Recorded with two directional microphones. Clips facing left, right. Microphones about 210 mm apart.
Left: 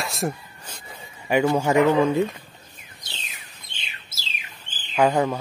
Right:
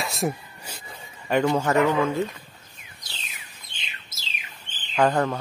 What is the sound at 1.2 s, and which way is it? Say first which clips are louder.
Speech: left 2 dB; 10° left (ahead or behind).